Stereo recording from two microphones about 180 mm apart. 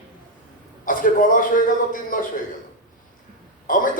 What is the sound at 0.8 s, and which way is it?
Speech, 50° left (ahead or behind).